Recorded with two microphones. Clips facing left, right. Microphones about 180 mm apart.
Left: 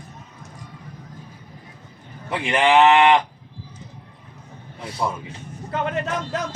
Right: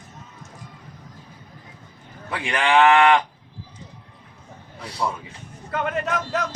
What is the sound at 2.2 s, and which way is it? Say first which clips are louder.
Speech: left 4 dB; 20° left (ahead or behind).